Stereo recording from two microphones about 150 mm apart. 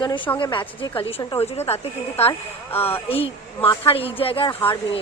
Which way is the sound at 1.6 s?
45° left (ahead or behind).